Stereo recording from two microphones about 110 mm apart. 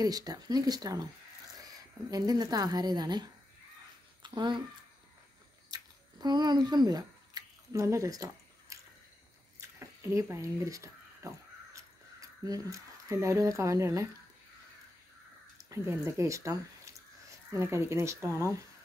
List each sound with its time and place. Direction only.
0.0 s speech: 35° right (ahead or behind)
2.0 s speech: 35° right (ahead or behind)
5.7 s a sound: 40° right (ahead or behind)
15.7 s speech: 25° right (ahead or behind)